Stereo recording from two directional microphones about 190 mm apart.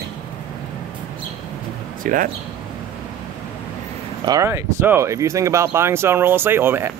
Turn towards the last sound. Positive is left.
turn(degrees=-10)  # may be behind; listen again after turning